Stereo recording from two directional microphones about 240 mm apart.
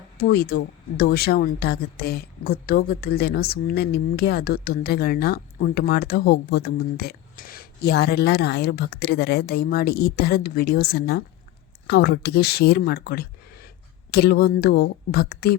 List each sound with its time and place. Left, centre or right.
0.2 s speech: left